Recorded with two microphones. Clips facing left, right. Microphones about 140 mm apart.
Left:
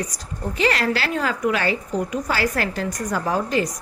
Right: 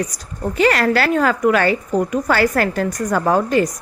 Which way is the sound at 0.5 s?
55° right (ahead or behind).